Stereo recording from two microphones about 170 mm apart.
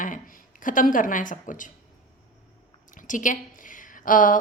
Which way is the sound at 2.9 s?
50° left (ahead or behind).